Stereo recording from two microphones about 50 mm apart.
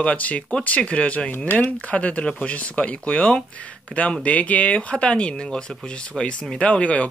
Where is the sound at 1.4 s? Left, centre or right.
Left.